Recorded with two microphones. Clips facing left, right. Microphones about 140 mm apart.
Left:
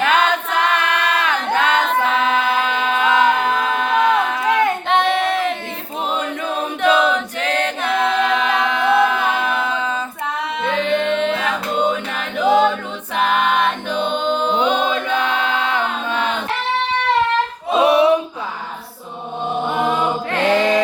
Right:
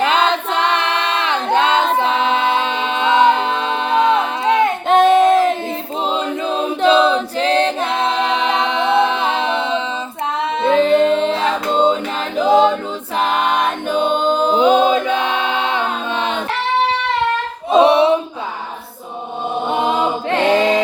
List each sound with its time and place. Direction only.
0.0 s choir: 25° right (ahead or behind)
4.9 s a sound: 45° right (ahead or behind)
6.1 s choir: 25° right (ahead or behind)
10.6 s music: 35° right (ahead or behind)
12.5 s a capella: 30° right (ahead or behind)
15.1 s choir: 20° right (ahead or behind)
17.7 s a sound: 25° right (ahead or behind)
19.7 s chant: 25° right (ahead or behind)